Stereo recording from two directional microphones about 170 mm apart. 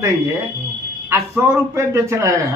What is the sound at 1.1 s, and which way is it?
A man's voice, 15° right (ahead or behind).